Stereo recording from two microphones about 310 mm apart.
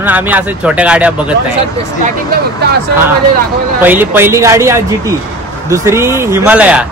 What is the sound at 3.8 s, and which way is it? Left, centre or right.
A man's voice, centre.